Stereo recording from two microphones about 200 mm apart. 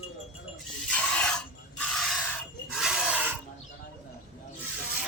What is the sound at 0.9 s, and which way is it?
Filing, 5° left (ahead or behind).